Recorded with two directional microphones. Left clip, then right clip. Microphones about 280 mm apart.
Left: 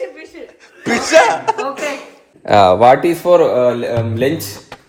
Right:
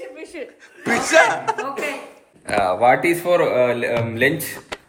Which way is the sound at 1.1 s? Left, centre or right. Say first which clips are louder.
Left 5 dB; centre.